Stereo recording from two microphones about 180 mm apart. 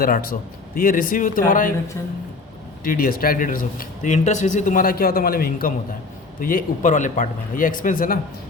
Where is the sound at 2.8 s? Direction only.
55° left (ahead or behind).